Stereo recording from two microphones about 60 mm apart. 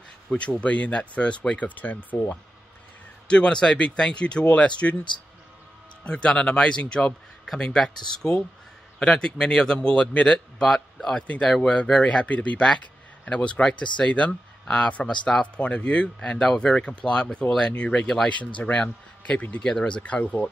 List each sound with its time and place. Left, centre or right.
0.3 s speech: centre
3.3 s a man's voice: centre
6.0 s a man's voice: centre
11.2 s a man's voice: left